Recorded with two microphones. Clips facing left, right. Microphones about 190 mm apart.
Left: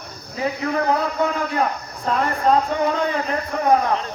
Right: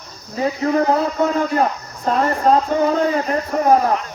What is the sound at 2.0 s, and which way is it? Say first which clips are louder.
Speech: right 3 dB; 35° right (ahead or behind).